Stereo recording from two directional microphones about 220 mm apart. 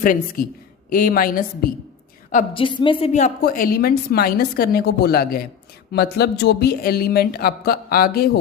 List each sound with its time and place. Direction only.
0.0 s a woman's voice: 40° left (ahead or behind)
2.5 s a woman's voice: 25° left (ahead or behind); by 8.3 s 45° left (ahead or behind)